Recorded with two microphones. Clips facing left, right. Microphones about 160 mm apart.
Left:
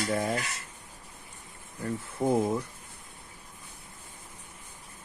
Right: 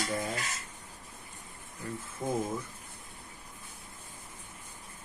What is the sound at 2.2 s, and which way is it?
Speech, 70° left (ahead or behind).